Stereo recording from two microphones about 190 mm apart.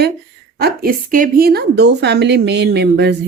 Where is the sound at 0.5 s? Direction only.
55° right (ahead or behind).